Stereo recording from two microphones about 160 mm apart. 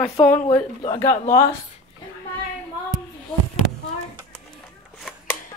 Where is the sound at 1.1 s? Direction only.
45° left (ahead or behind).